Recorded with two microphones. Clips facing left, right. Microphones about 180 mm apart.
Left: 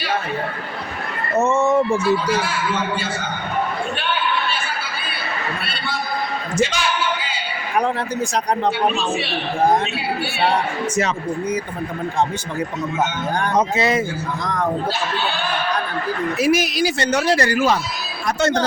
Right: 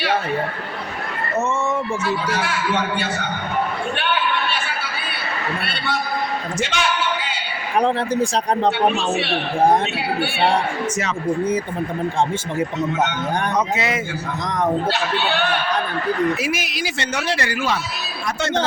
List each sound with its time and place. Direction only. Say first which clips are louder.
6.6 s a sound: left 3 dB; 65° right (ahead or behind)
7.8 s speech: right 3 dB; 30° right (ahead or behind)
13.6 s speech: left 3 dB; 35° left (ahead or behind)
14.4 s speech: right 1 dB; 20° right (ahead or behind)
16.4 s speech: left 7 dB; 40° left (ahead or behind)